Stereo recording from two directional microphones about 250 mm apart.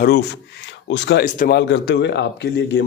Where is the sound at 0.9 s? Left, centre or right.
Left.